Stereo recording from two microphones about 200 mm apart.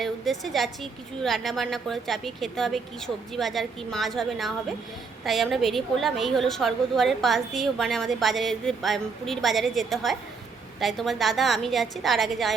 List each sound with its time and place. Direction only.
0.0 s a woman's voice: centre (ahead or behind)